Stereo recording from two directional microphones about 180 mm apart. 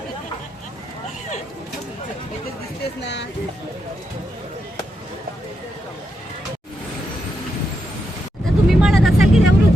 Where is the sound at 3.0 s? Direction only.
70° left (ahead or behind).